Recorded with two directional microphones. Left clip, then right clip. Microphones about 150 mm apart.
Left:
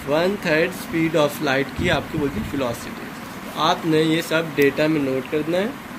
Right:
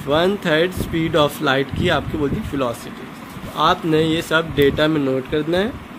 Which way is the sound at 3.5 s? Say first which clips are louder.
Right 3 dB; 60° right (ahead or behind).